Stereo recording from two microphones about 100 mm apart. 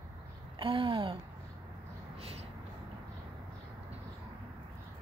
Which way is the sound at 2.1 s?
85° right.